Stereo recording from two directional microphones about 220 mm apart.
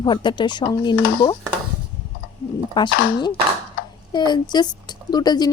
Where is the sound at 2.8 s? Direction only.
20° left (ahead or behind).